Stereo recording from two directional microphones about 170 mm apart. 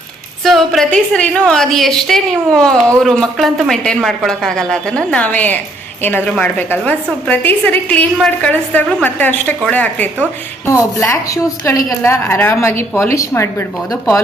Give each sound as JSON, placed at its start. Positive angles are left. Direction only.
{"t": 0.4, "sound": "a woman's voice", "side_deg": 0}